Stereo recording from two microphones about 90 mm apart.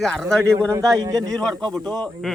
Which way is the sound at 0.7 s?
35° right (ahead or behind).